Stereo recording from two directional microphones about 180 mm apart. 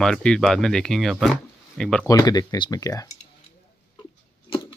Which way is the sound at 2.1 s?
20° left (ahead or behind).